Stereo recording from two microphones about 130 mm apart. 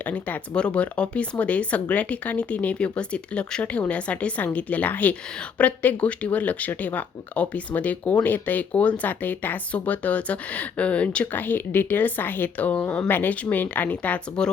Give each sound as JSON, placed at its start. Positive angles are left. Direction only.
{"t": 0.0, "sound": "speech", "side_deg": 10}